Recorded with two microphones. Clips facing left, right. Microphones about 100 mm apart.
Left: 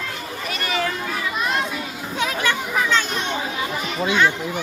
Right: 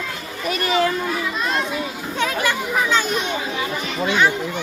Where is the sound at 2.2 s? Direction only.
Centre (ahead or behind).